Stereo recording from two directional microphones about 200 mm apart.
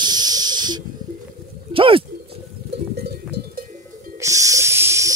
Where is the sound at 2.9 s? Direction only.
55° right (ahead or behind).